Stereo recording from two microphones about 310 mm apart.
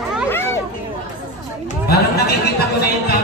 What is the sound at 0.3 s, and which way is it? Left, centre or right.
Hubbub, centre.